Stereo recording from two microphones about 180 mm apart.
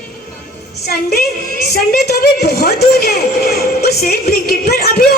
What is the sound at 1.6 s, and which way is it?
A woman's voice, 60° left (ahead or behind).